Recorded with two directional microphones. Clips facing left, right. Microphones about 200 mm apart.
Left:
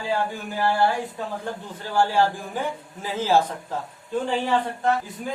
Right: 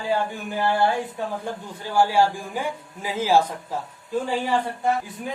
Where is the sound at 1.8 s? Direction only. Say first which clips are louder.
Right 1 dB; 10° right (ahead or behind).